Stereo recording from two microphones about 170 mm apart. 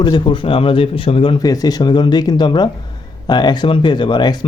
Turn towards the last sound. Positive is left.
turn(degrees=25)  # may be behind; listen again after turning